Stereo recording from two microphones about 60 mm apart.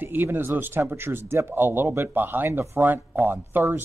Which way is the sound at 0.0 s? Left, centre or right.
Right.